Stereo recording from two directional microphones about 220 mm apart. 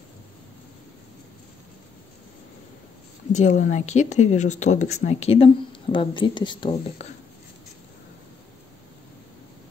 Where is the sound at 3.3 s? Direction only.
35° left (ahead or behind).